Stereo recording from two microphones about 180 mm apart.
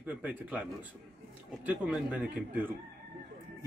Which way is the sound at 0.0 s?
10° right (ahead or behind).